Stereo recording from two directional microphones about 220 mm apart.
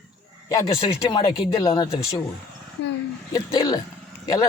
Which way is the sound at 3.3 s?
15° left (ahead or behind).